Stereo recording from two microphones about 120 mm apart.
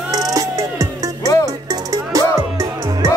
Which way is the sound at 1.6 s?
30° right (ahead or behind).